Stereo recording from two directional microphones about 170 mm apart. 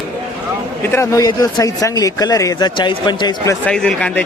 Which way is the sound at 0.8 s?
15° left (ahead or behind).